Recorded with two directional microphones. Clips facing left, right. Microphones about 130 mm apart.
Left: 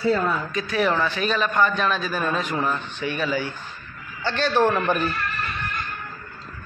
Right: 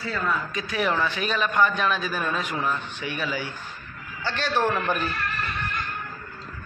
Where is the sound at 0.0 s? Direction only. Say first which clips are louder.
Left 6 dB; 30° left (ahead or behind).